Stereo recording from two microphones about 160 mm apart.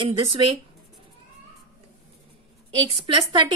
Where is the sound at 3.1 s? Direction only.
30° right (ahead or behind).